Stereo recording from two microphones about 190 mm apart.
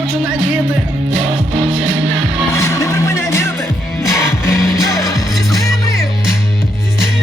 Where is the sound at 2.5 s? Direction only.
15° left (ahead or behind).